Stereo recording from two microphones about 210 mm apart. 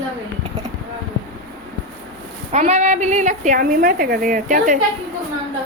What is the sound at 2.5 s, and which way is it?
A woman's voice, 30° right (ahead or behind).